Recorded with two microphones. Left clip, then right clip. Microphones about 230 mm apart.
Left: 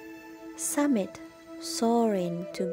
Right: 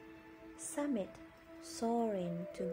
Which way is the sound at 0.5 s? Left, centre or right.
Left.